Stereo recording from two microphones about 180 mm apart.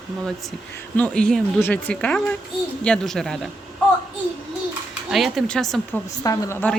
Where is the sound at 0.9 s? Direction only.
5° left (ahead or behind).